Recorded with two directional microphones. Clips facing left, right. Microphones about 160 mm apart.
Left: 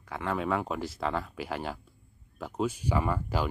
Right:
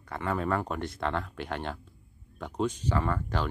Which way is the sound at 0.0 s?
Centre (ahead or behind).